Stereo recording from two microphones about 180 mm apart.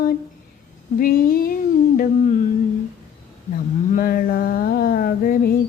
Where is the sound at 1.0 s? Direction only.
55° left (ahead or behind).